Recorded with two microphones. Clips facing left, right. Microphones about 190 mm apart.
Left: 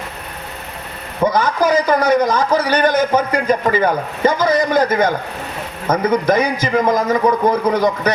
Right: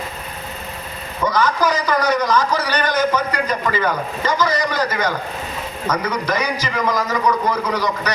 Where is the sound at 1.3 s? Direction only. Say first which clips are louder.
Left 2 dB; 55° left (ahead or behind).